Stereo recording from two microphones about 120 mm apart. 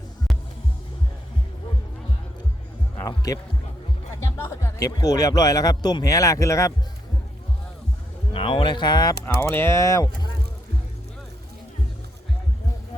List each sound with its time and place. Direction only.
3.0 s heart sounds: 30° left (ahead or behind)
4.4 s speech: 20° left (ahead or behind)
4.9 s speech: 30° left (ahead or behind)
8.3 s speech: 50° left (ahead or behind)
9.2 s speech: 20° left (ahead or behind)